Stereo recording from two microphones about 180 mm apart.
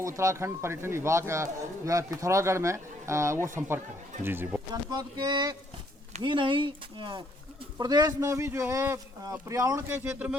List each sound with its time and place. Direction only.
0.0 s a man's voice: 15° right (ahead or behind)